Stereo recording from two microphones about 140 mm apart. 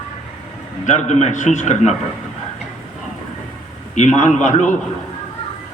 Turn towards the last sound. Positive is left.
turn(degrees=60)  # may be behind; listen again after turning